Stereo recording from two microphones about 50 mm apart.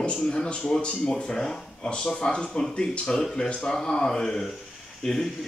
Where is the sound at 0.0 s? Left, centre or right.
Centre.